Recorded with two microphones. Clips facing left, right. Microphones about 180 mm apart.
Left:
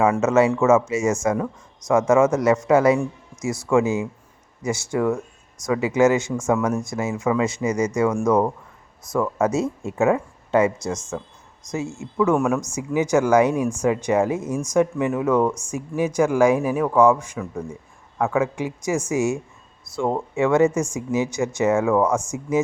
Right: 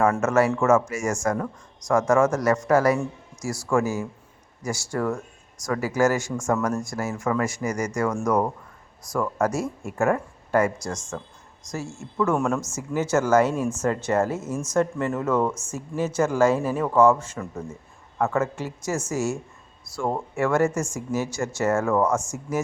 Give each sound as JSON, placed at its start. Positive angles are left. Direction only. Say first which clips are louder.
{"t": 0.0, "sound": "speech", "louder": "left 3 dB", "side_deg": 20}
{"t": 1.1, "sound": "speech", "louder": "left 3 dB", "side_deg": 5}
{"t": 2.4, "sound": "speech", "louder": "left 3 dB", "side_deg": 20}
{"t": 3.0, "sound": "a man's voice", "louder": "left 4 dB", "side_deg": 0}
{"t": 3.7, "sound": "speech", "louder": "left 4 dB", "side_deg": 20}
{"t": 4.9, "sound": "speech", "louder": "left 4 dB", "side_deg": 5}
{"t": 5.6, "sound": "speech", "louder": "left 4 dB", "side_deg": 20}
{"t": 6.3, "sound": "speech", "louder": "left 3 dB", "side_deg": 5}
{"t": 7.0, "sound": "speech", "louder": "left 4 dB", "side_deg": 15}
{"t": 7.9, "sound": "speech", "louder": "left 4 dB", "side_deg": 5}
{"t": 9.5, "sound": "speech", "louder": "left 5 dB", "side_deg": 20}
{"t": 11.1, "sound": "speech", "louder": "left 4 dB", "side_deg": 10}
{"t": 17.3, "sound": "speech", "louder": "left 3 dB", "side_deg": 0}
{"t": 18.3, "sound": "speech", "louder": "left 3 dB", "side_deg": 15}